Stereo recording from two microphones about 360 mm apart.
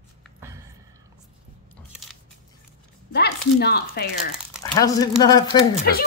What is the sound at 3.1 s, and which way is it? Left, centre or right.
Speech, left.